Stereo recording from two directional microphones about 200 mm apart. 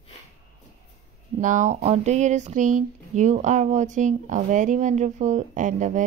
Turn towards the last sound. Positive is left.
turn(degrees=-40)  # may be behind; listen again after turning